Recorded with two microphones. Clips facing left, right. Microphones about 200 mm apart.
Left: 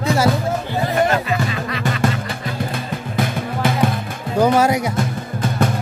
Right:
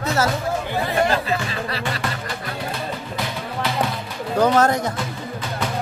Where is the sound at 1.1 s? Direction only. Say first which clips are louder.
Left 3 dB; 35° right (ahead or behind).